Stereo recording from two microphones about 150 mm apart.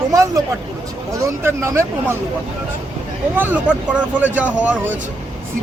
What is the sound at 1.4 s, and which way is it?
Speech, 20° right (ahead or behind).